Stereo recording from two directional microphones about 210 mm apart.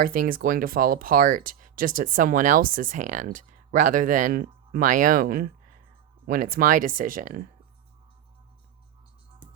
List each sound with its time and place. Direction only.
0.0 s speech: 40° right (ahead or behind)